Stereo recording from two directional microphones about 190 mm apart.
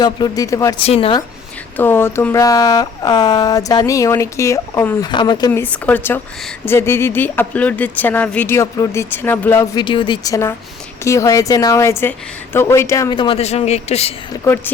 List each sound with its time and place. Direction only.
0.0 s a man's voice: 20° left (ahead or behind)
0.8 s a man's voice: 30° left (ahead or behind)
1.7 s a man's voice: 10° left (ahead or behind)
5.5 s speech: 10° left (ahead or behind)
9.7 s a man's voice: 25° left (ahead or behind)
14.4 s speech: 10° left (ahead or behind)